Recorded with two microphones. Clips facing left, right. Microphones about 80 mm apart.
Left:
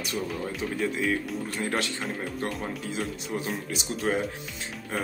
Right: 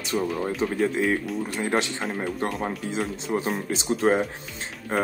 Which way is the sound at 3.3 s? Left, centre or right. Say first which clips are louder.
Right 5 dB; right.